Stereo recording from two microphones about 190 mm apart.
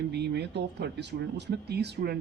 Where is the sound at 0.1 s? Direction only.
60° right (ahead or behind).